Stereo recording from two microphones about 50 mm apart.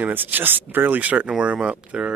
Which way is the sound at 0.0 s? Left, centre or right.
Right.